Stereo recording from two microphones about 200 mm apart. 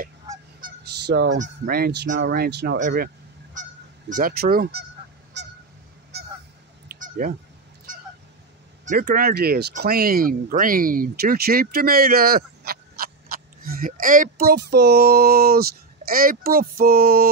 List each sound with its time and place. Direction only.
0.6 s goose: 55° right (ahead or behind)
1.4 s speech: 50° right (ahead or behind)
4.1 s speech: 50° right (ahead or behind)
5.4 s goose: 60° right (ahead or behind)
6.1 s honk: 55° right (ahead or behind)
6.9 s cat: 45° right (ahead or behind)
8.8 s speech: 50° right (ahead or behind)